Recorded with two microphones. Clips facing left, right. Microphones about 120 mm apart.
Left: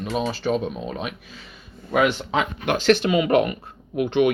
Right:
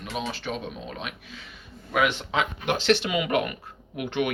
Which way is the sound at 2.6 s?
45° left (ahead or behind).